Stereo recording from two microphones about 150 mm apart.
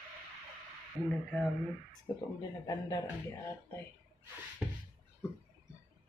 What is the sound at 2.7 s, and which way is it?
Speech, 25° left (ahead or behind).